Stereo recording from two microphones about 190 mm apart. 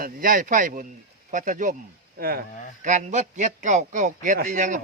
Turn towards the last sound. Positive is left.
turn(degrees=-40)  # may be behind; listen again after turning